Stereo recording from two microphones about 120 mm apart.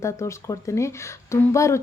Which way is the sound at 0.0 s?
25° left (ahead or behind).